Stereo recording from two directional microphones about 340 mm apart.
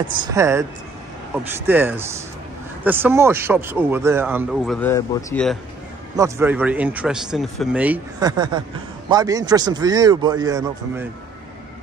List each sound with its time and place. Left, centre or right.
0.2 s a man's voice: centre
1.7 s a man's voice: centre
6.1 s a man's voice: centre